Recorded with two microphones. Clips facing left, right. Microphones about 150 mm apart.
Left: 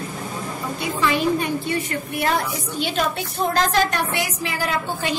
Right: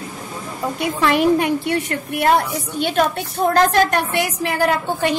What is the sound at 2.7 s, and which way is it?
A woman's voice, 55° right (ahead or behind).